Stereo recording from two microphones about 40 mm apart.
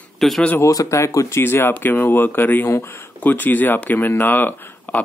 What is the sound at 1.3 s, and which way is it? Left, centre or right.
Speech, left.